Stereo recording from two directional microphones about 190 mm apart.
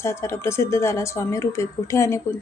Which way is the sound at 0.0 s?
15° left (ahead or behind).